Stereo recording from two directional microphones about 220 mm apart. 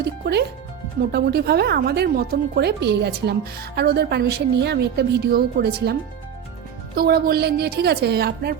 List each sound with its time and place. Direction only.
0.0 s speech: 50° right (ahead or behind)